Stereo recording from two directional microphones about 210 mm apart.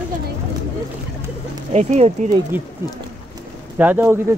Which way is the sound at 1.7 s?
30° right (ahead or behind).